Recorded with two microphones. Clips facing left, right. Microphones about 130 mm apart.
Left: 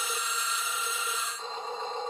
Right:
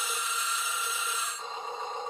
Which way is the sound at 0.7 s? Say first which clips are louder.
Even; 15° left (ahead or behind).